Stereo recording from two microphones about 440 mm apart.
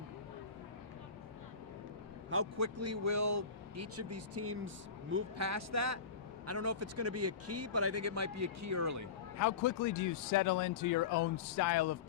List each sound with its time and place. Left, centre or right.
2.3 s speech: right
9.4 s speech: left